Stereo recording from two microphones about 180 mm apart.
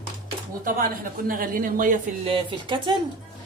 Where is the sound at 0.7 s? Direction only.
50° right (ahead or behind).